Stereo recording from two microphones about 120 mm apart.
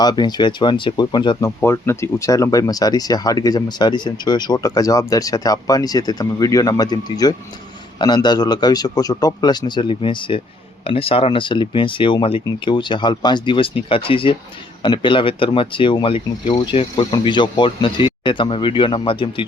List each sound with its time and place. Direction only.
0.0 s speech: 35° left (ahead or behind)
1.4 s speech: 20° left (ahead or behind); by 19.5 s 45° left (ahead or behind)